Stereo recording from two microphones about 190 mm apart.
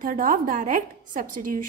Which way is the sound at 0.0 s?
45° right (ahead or behind).